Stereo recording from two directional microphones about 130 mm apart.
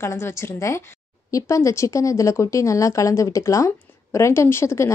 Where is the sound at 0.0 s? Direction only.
20° left (ahead or behind).